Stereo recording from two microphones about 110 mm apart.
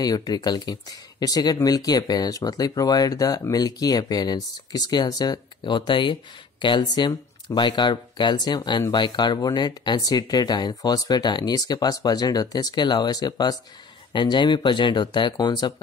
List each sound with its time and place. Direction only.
0.0 s speech: 35° left (ahead or behind)